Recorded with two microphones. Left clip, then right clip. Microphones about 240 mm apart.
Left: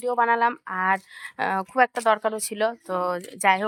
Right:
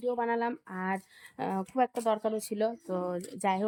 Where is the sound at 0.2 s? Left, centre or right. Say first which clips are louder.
Left 10 dB; centre.